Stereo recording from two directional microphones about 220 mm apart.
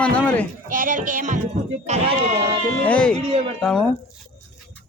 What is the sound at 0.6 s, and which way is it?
Speech, 35° right (ahead or behind).